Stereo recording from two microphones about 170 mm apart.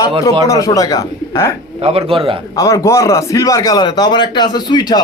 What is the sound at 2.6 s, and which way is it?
A man's voice, 20° left (ahead or behind).